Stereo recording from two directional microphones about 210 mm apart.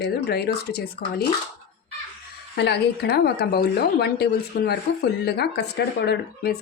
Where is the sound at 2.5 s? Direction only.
55° left (ahead or behind).